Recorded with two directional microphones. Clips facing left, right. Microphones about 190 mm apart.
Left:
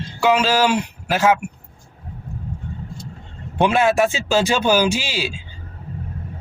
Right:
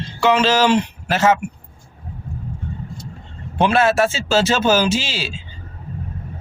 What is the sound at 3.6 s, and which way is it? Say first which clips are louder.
Speech: even; 15° left (ahead or behind).